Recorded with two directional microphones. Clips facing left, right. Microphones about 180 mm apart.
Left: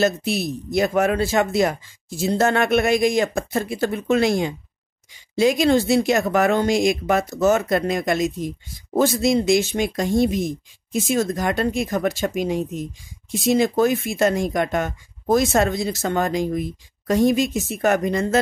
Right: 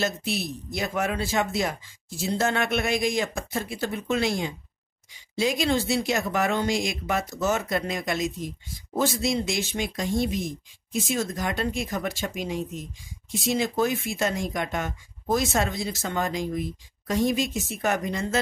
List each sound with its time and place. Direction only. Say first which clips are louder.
0.7 s speech: left 9 dB; 55° left (ahead or behind)
2.3 s speech: left 7 dB; 55° left (ahead or behind)
5.3 s speech: left 7 dB; 50° left (ahead or behind)